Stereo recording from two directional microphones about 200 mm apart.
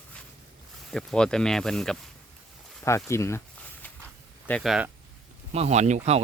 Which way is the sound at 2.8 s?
15° left (ahead or behind).